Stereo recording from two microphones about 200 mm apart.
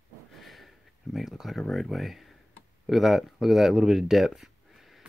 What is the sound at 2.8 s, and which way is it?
Speech, centre (ahead or behind).